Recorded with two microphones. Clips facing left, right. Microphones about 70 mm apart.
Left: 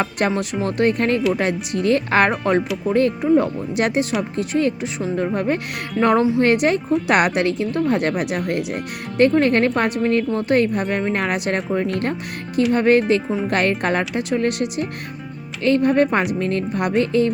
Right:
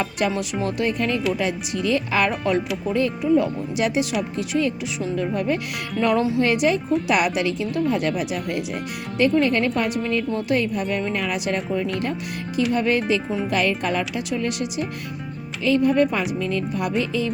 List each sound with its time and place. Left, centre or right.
0.0 s speech: left
6.4 s speech: left